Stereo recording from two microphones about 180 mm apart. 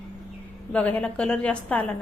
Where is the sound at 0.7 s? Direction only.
5° left (ahead or behind).